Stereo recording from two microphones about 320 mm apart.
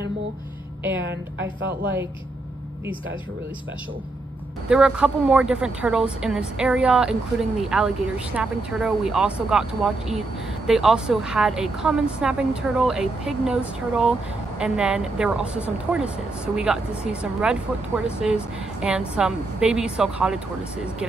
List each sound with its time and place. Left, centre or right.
1.0 s a woman's voice: right
4.6 s a woman's voice: centre